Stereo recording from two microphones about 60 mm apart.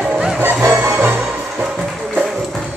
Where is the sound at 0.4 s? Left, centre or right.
Right.